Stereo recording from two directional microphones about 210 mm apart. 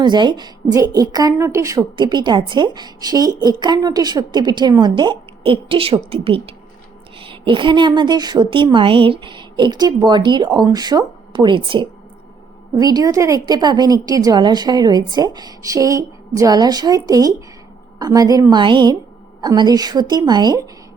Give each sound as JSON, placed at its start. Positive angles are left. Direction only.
{"t": 0.0, "sound": "a woman's voice", "side_deg": -20}